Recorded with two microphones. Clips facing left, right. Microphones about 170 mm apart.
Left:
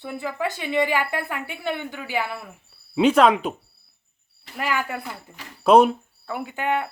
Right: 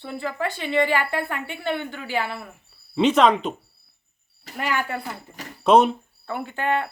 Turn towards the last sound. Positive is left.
turn(degrees=15)  # may be behind; listen again after turning